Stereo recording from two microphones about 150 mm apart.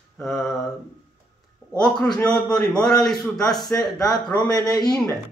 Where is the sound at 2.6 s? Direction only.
25° left (ahead or behind).